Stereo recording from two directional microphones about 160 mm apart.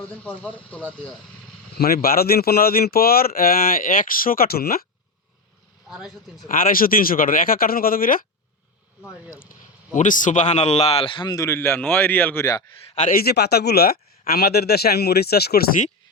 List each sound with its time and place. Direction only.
0.0 s speech: 10° left (ahead or behind)
1.8 s speech: 70° left (ahead or behind)
6.5 s speech: 60° left (ahead or behind)
9.9 s a man's voice: 55° left (ahead or behind); by 12.5 s 10° left (ahead or behind)
12.5 s a man's voice: 25° left (ahead or behind)
13.0 s speech: 65° left (ahead or behind)